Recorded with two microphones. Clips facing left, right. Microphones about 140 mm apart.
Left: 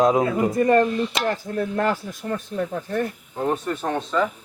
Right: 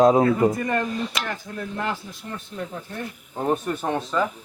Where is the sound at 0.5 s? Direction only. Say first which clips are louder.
Left 8 dB; 35° left (ahead or behind).